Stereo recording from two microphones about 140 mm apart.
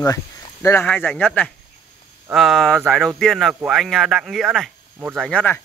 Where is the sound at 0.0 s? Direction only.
20° left (ahead or behind).